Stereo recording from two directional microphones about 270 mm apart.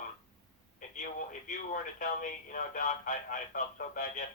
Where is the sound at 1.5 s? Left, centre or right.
Left.